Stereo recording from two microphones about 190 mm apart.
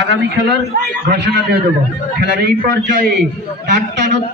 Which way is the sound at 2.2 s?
60° right (ahead or behind).